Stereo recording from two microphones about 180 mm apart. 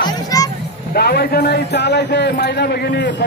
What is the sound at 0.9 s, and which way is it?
A man's voice, 60° left (ahead or behind).